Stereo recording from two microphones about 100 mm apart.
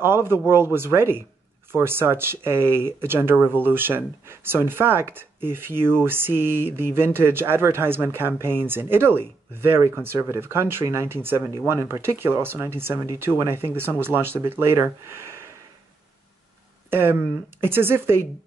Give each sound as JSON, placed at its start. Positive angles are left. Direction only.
{"t": 0.0, "sound": "speech", "side_deg": -25}
{"t": 15.2, "sound": "sniff", "side_deg": -25}
{"t": 16.9, "sound": "speech", "side_deg": -25}